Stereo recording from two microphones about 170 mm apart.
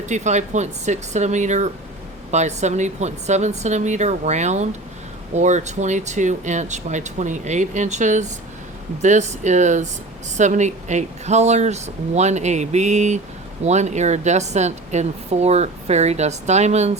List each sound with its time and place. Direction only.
0.0 s speech: 45° right (ahead or behind)